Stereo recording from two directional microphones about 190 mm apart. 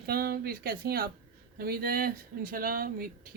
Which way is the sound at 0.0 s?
55° right (ahead or behind).